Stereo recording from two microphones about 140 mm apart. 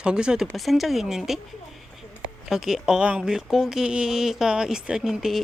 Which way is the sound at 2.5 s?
5° right (ahead or behind).